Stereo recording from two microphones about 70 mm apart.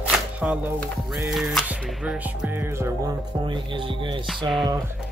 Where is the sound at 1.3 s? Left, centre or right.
Centre.